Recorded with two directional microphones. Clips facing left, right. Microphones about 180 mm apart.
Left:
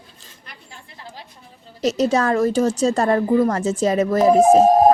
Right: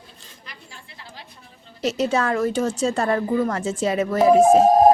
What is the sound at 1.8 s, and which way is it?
A woman's voice, 40° left (ahead or behind).